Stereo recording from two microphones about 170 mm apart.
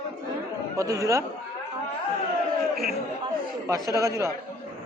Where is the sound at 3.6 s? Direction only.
20° right (ahead or behind).